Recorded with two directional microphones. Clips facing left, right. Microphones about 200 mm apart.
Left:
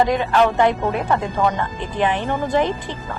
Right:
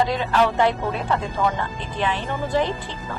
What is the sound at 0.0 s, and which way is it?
Speech, 55° left (ahead or behind).